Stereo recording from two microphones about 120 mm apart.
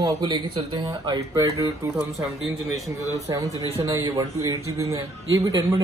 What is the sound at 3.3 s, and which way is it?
Speech, 25° right (ahead or behind).